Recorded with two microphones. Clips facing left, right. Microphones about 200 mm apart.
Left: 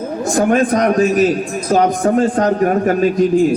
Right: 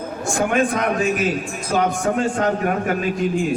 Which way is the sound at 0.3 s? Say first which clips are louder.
Left 6 dB; 40° left (ahead or behind).